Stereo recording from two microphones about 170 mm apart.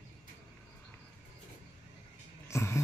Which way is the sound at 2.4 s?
15° left (ahead or behind).